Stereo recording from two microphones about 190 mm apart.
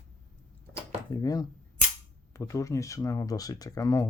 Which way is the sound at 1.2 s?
20° left (ahead or behind).